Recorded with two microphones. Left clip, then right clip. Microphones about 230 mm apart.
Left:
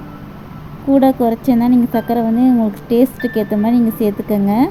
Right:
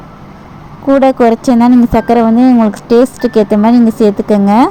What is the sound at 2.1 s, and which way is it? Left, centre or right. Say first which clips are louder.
Speech: right 7 dB; right.